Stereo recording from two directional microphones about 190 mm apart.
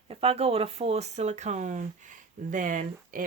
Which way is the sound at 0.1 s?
30° right (ahead or behind).